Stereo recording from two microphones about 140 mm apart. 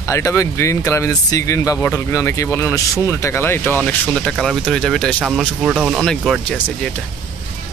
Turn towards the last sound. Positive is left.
turn(degrees=5)  # may be behind; listen again after turning